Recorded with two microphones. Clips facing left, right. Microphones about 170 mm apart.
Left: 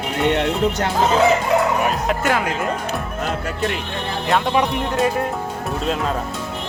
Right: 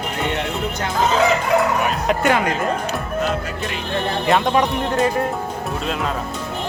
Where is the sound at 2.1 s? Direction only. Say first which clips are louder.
Right 2 dB; centre (ahead or behind).